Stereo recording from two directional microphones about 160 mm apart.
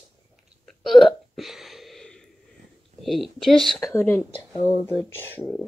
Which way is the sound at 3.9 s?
15° left (ahead or behind).